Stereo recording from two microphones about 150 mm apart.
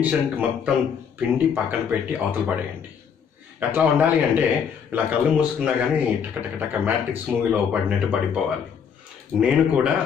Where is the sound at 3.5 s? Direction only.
10° right (ahead or behind).